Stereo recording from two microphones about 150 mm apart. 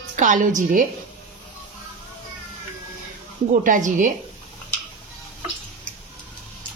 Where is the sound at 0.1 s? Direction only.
55° right (ahead or behind).